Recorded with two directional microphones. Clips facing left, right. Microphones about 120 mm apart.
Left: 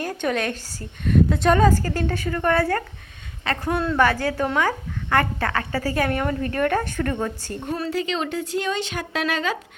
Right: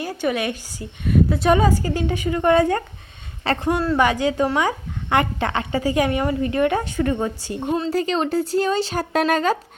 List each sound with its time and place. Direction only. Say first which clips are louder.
0.0 s speech: right 1 dB; 5° right (ahead or behind)
3.4 s a man's voice: right 4 dB; 30° right (ahead or behind)
3.7 s speech: right 1 dB; 10° right (ahead or behind)
7.9 s speech: right 2 dB; 40° right (ahead or behind)